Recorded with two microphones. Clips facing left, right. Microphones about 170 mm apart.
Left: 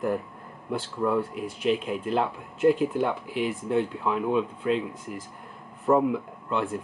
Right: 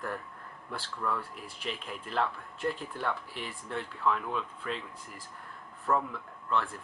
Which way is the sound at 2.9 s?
20° left (ahead or behind).